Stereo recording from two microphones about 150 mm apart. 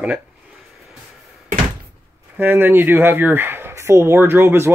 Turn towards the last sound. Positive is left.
turn(degrees=-15)  # may be behind; listen again after turning